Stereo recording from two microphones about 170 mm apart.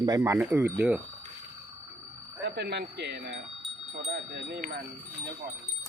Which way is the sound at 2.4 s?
75° right (ahead or behind).